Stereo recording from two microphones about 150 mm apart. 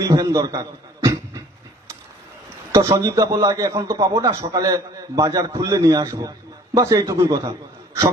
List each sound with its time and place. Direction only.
0.0 s a man's voice: 25° right (ahead or behind)
2.7 s a man's voice: 25° right (ahead or behind)